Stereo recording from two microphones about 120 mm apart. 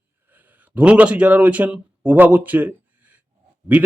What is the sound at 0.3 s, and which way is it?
Speech, 15° right (ahead or behind).